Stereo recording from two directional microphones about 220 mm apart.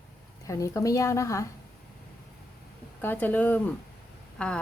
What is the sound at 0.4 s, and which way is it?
A woman's voice, 15° left (ahead or behind).